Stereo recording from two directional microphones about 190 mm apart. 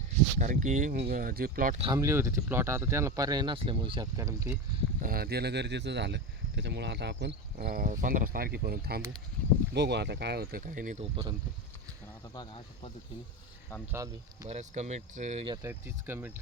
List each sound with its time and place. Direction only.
0.3 s speech: 45° right (ahead or behind)
2.0 s speech: 15° right (ahead or behind)
4.9 s speech: 50° right (ahead or behind)
12.3 s speech: 25° left (ahead or behind)
13.9 s speech: 15° right (ahead or behind)
14.5 s speech: 35° right (ahead or behind)
15.6 s speech: 10° right (ahead or behind)